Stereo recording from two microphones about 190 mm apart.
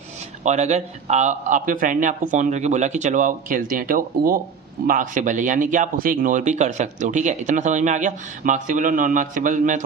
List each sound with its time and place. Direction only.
0.4 s speech: 35° right (ahead or behind)